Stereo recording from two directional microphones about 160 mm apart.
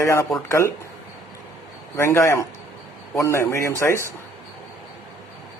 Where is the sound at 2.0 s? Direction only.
15° left (ahead or behind).